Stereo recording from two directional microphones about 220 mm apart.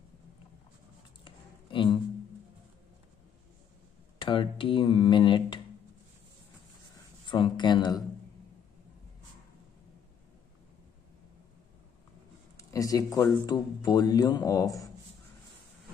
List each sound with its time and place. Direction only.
1.2 s a sound: 20° left (ahead or behind)
4.2 s speech: 20° left (ahead or behind)
7.2 s speech: 20° left (ahead or behind)
12.5 s speech: 15° left (ahead or behind)